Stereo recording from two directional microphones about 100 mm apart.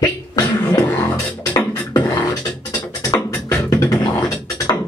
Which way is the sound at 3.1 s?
35° left (ahead or behind).